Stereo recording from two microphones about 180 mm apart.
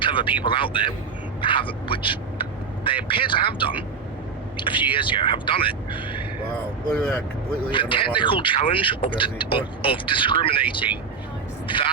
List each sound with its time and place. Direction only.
0.0 s speech: 30° left (ahead or behind)
6.9 s speech: 5° left (ahead or behind)
7.7 s speech: 30° left (ahead or behind)